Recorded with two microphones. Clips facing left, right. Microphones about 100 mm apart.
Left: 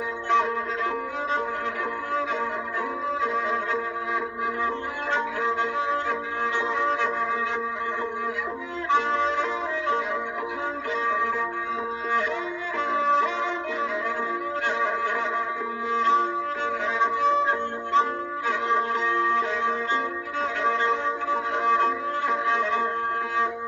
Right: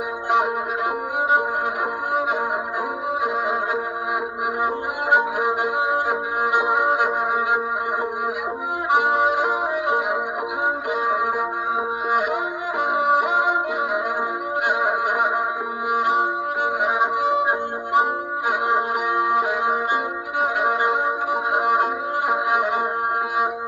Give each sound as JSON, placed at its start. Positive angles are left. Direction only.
{"t": 5.1, "sound": "music", "side_deg": -15}
{"t": 8.9, "sound": "music", "side_deg": -15}
{"t": 12.9, "sound": "music", "side_deg": -15}
{"t": 14.7, "sound": "music", "side_deg": -15}